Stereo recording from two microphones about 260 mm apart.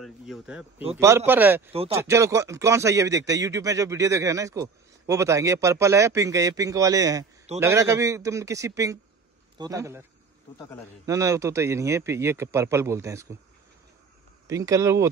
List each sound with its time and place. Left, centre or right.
0.0 s speech: centre
1.7 s speech: right
2.0 s speech: centre
11.1 s speech: centre
14.5 s speech: centre